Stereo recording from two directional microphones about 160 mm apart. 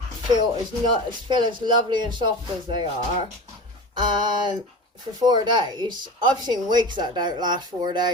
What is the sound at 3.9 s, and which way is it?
Speech, 30° right (ahead or behind).